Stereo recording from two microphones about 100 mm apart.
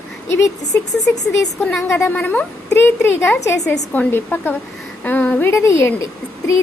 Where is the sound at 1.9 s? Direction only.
25° left (ahead or behind).